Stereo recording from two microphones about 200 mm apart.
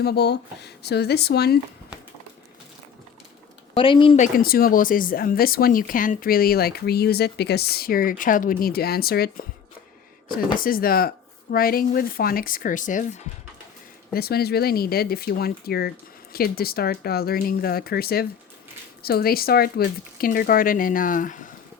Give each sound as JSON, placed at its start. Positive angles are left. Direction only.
{"t": 0.0, "sound": "speech", "side_deg": 55}
{"t": 3.8, "sound": "speech", "side_deg": 25}
{"t": 4.2, "sound": "speech", "side_deg": 45}
{"t": 14.1, "sound": "speech", "side_deg": 50}